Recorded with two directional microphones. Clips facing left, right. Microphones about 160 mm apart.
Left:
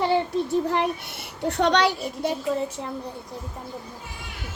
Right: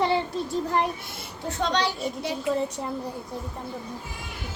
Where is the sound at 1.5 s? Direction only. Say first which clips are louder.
Left 5 dB; 70° left (ahead or behind).